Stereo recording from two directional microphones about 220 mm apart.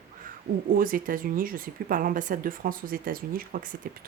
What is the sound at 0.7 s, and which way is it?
Speech, 40° right (ahead or behind).